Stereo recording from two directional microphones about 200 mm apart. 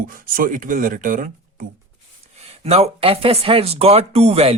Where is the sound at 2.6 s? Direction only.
30° right (ahead or behind).